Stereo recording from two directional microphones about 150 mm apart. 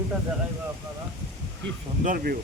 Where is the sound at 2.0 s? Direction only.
70° right (ahead or behind).